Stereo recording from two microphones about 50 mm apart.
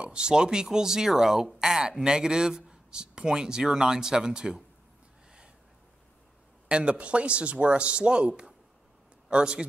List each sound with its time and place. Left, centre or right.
0.0 s speech: centre
6.7 s speech: right